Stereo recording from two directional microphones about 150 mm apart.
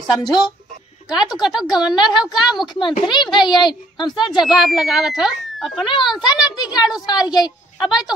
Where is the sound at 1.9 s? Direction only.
30° left (ahead or behind).